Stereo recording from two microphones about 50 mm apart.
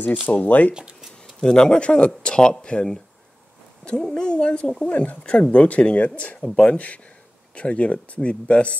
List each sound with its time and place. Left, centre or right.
0.3 s speech: left
1.2 s speech: centre